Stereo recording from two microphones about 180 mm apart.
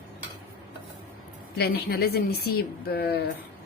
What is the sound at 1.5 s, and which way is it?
Speech, 60° left (ahead or behind).